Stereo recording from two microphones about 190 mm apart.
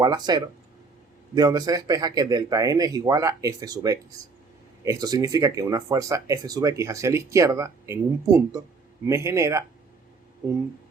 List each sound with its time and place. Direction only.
0.0 s speech: 20° right (ahead or behind)